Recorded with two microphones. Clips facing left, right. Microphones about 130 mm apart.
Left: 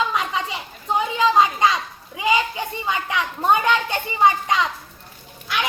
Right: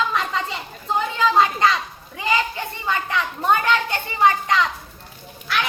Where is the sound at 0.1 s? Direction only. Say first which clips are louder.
Even; 10° left (ahead or behind).